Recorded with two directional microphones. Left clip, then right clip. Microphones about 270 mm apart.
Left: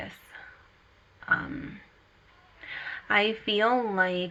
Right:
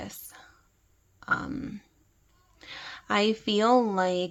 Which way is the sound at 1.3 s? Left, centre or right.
Right.